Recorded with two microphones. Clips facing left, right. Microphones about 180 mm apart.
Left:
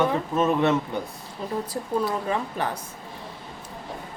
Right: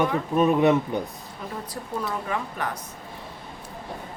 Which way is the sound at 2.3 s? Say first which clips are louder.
Left 2 dB; 30° left (ahead or behind).